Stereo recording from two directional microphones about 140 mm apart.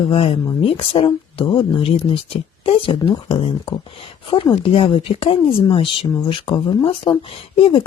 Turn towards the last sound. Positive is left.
turn(degrees=40)  # may be behind; listen again after turning